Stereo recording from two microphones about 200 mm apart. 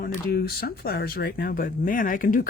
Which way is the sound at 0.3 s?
50° left (ahead or behind).